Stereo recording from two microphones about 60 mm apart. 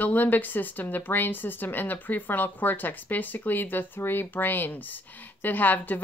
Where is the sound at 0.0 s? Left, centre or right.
Left.